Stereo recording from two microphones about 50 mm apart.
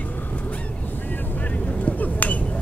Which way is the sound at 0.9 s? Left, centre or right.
Left.